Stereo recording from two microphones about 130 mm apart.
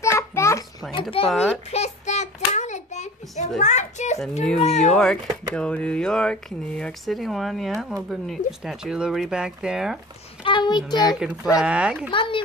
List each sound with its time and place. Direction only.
0.0 s a sound: 20° left (ahead or behind)
1.3 s speech: 5° right (ahead or behind)
1.7 s child singing: 60° left (ahead or behind)
4.6 s speech: 55° left (ahead or behind)
4.9 s speech: 5° left (ahead or behind)
10.4 s a child's voice: 35° left (ahead or behind)
11.1 s speech: 5° right (ahead or behind)
12.1 s speech: 40° left (ahead or behind)